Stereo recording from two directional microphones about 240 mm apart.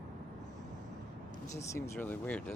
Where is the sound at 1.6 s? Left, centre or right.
Centre.